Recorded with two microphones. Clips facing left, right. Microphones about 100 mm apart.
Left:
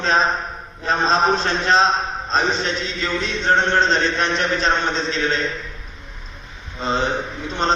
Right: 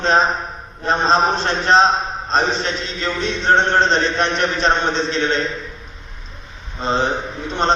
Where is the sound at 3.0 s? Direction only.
35° right (ahead or behind).